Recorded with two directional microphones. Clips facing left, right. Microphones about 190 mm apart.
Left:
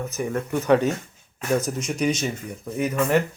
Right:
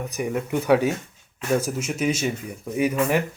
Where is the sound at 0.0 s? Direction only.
15° right (ahead or behind).